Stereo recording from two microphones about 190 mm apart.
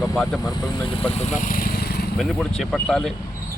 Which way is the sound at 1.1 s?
35° left (ahead or behind).